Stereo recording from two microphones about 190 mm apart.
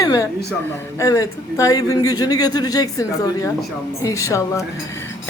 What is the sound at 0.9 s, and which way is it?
A man's voice, 20° left (ahead or behind).